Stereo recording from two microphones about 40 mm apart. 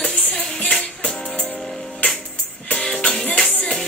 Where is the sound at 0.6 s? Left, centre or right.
Left.